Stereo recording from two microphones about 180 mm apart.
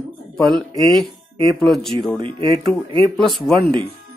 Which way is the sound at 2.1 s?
25° right (ahead or behind).